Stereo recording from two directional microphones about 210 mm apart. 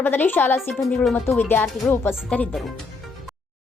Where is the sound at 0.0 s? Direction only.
10° left (ahead or behind).